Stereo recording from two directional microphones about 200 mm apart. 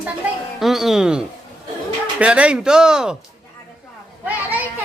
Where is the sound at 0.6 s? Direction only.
Centre (ahead or behind).